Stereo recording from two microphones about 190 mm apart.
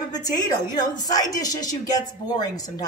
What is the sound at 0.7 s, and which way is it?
Speech, 20° left (ahead or behind).